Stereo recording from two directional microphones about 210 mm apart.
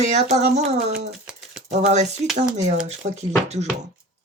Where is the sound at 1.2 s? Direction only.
5° right (ahead or behind).